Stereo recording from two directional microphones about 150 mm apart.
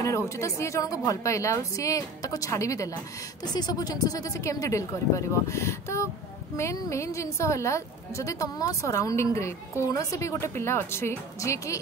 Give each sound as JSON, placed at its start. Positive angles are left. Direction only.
{"t": 0.0, "sound": "a woman's voice", "side_deg": 20}